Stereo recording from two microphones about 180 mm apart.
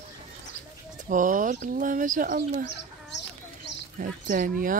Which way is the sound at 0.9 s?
45° right (ahead or behind).